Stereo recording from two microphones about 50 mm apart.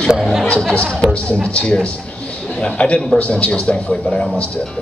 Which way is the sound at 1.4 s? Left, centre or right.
Left.